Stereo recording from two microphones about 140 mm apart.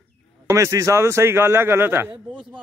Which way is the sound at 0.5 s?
20° right (ahead or behind).